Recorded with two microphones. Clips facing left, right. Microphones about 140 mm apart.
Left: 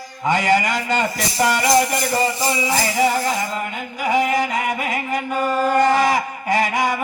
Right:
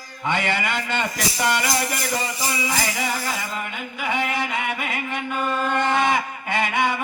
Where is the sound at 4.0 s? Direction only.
40° left (ahead or behind).